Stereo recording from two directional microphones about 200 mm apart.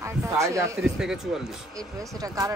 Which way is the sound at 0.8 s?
5° right (ahead or behind).